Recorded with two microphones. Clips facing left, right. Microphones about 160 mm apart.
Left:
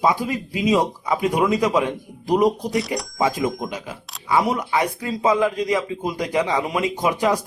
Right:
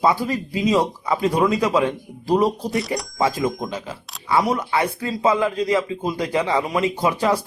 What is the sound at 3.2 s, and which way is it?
Speech, 15° left (ahead or behind).